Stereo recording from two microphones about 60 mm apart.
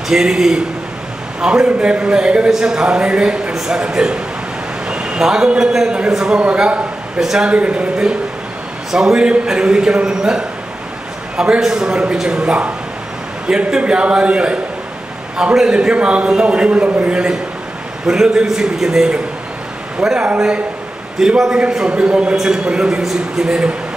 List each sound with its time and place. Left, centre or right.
0.1 s a man's voice: centre